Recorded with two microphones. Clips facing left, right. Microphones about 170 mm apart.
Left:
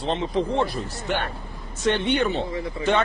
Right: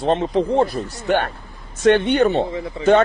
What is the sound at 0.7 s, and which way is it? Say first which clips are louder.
Speech: right 7 dB; 50° right (ahead or behind).